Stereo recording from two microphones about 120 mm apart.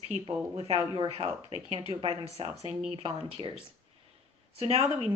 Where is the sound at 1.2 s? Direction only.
60° right (ahead or behind).